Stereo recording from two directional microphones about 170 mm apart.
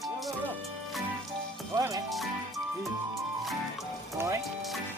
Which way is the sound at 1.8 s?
20° right (ahead or behind).